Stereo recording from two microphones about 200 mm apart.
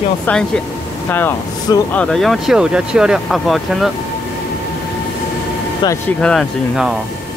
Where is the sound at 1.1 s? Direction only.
10° left (ahead or behind).